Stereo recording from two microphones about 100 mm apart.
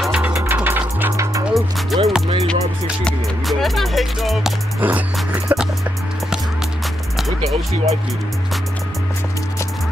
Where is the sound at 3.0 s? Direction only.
Centre (ahead or behind).